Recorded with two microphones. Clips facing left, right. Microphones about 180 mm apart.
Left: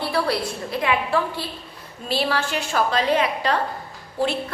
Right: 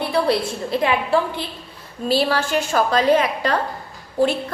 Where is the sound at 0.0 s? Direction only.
20° right (ahead or behind); by 3.5 s 45° right (ahead or behind).